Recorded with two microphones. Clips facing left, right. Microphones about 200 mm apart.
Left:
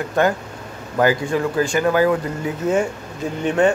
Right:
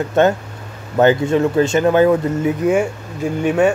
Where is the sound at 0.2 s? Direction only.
25° right (ahead or behind).